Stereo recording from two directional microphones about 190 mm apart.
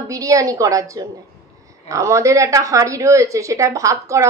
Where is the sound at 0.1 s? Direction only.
15° right (ahead or behind).